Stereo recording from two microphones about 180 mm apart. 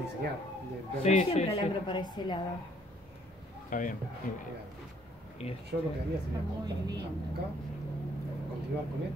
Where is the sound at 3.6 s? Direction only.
45° left (ahead or behind).